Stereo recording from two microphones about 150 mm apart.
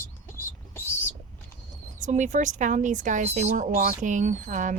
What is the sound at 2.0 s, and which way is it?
A woman's voice, 55° right (ahead or behind).